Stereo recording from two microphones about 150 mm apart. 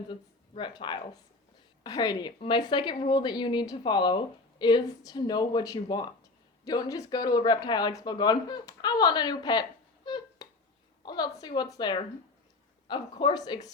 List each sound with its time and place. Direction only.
0.1 s a woman's voice: 30° left (ahead or behind)
10.1 s a sound: 25° left (ahead or behind)
11.0 s a woman's voice: 25° left (ahead or behind)